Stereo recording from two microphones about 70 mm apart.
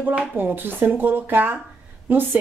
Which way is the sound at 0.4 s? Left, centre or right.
Right.